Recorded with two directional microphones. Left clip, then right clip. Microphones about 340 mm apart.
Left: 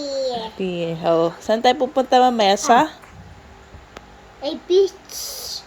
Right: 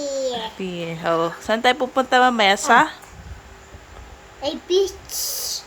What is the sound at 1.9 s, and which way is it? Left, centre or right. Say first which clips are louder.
Speech: left 1 dB; centre.